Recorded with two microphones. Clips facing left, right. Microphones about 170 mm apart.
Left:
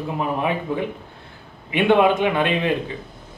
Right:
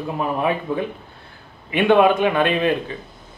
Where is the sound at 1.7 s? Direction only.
20° left (ahead or behind).